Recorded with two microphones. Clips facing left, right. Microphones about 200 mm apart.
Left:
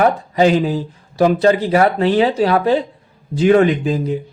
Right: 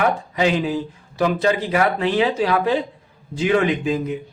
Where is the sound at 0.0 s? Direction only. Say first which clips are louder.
Left 6 dB; 40° left (ahead or behind).